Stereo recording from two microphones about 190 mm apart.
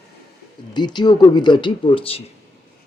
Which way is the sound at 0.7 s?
20° left (ahead or behind).